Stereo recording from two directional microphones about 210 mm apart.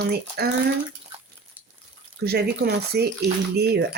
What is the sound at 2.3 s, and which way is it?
Speech, 50° right (ahead or behind).